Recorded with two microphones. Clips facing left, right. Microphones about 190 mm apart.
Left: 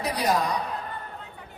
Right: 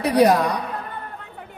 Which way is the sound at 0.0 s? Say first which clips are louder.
Right 9 dB; 60° right (ahead or behind).